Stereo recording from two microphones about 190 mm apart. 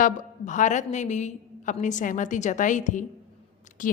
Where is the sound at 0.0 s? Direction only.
40° left (ahead or behind).